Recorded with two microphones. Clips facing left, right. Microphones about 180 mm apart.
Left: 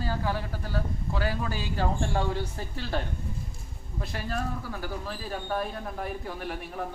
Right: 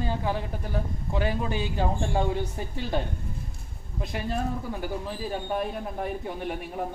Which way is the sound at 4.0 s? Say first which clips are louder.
Right 3 dB; 20° right (ahead or behind).